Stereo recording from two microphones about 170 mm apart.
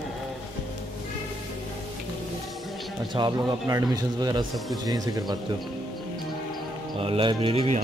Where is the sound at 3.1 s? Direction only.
25° right (ahead or behind).